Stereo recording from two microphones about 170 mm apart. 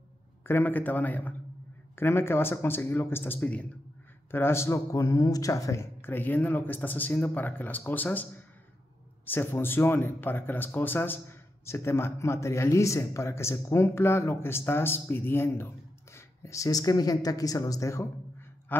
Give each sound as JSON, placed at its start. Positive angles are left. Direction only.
{"t": 0.5, "sound": "speech", "side_deg": 10}